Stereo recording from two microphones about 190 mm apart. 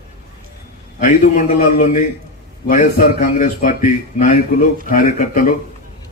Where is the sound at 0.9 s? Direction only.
40° left (ahead or behind).